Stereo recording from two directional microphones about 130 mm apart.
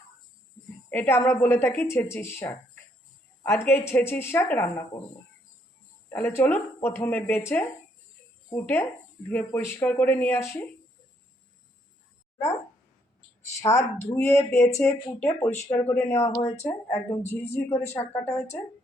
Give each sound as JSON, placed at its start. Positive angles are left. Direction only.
{"t": 0.9, "sound": "a woman's voice", "side_deg": 15}
{"t": 6.1, "sound": "a woman's voice", "side_deg": 15}
{"t": 13.6, "sound": "a woman's voice", "side_deg": 25}